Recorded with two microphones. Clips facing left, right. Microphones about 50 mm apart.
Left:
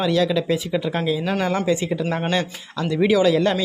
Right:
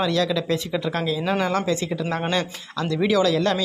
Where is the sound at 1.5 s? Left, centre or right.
Centre.